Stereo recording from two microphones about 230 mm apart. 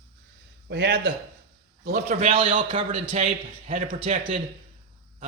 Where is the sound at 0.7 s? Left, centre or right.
Right.